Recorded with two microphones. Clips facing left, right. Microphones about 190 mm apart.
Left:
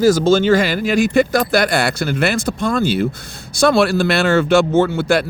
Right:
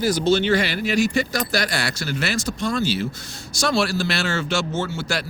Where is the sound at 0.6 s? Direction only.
50° left (ahead or behind).